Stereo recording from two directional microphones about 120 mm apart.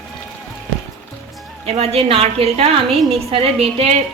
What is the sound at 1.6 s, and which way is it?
A woman's voice, 60° right (ahead or behind).